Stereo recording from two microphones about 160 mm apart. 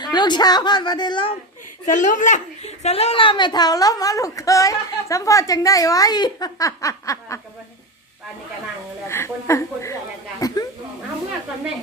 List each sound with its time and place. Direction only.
0.0 s a woman's voice: 25° left (ahead or behind)
1.9 s a woman's voice: 50° left (ahead or behind); by 7.3 s 20° left (ahead or behind)
9.0 s a woman's voice: 15° left (ahead or behind)
10.4 s a sound: 20° left (ahead or behind)